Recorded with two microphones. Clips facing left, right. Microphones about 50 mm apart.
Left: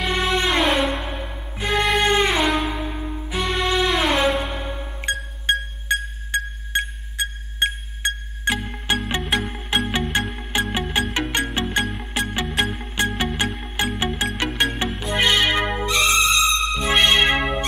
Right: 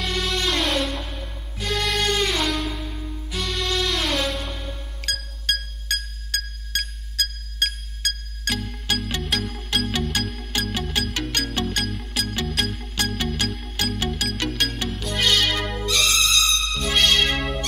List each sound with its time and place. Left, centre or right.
0.0 s music: left